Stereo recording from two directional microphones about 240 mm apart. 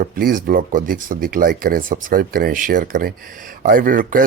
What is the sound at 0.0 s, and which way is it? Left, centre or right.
Speech, right.